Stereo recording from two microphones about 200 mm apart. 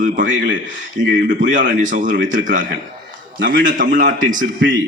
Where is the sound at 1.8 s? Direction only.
40° right (ahead or behind).